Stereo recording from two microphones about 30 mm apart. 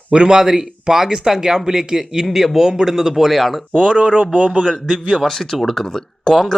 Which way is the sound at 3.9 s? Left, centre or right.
Right.